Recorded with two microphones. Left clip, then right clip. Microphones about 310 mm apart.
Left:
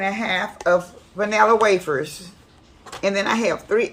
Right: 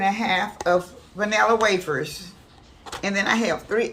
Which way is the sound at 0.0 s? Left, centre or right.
Centre.